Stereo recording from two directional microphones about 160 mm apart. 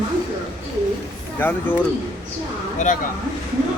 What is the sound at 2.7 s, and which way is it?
Speech, 50° left (ahead or behind).